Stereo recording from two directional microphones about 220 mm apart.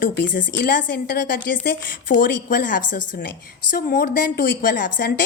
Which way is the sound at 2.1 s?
35° left (ahead or behind).